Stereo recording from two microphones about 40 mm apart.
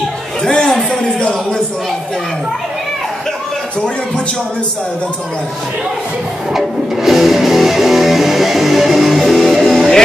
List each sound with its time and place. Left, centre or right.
0.4 s a man's voice: centre
6.5 s music: centre